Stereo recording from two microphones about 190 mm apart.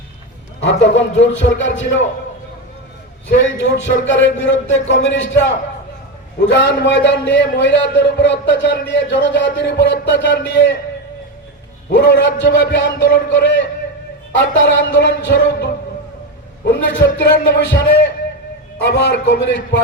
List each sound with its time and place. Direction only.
0.6 s a man's voice: 70° left (ahead or behind)
3.2 s a man's voice: 75° left (ahead or behind)
11.9 s a man's voice: 65° left (ahead or behind)
16.6 s a man's voice: 70° left (ahead or behind)